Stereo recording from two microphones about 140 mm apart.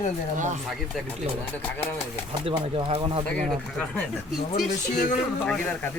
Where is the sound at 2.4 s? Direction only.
35° right (ahead or behind).